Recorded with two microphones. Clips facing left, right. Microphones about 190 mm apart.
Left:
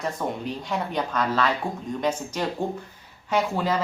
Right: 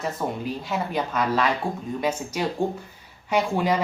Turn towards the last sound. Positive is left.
turn(degrees=-15)  # may be behind; listen again after turning